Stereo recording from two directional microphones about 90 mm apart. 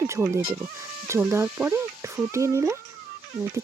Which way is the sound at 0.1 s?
30° right (ahead or behind).